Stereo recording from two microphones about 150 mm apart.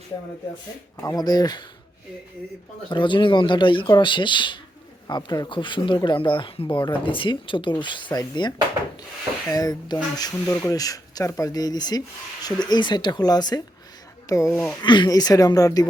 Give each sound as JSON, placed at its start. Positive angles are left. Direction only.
{"t": 1.0, "sound": "speech", "side_deg": 25}
{"t": 2.9, "sound": "speech", "side_deg": 30}